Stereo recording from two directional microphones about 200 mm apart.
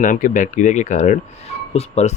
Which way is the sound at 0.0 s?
40° left (ahead or behind).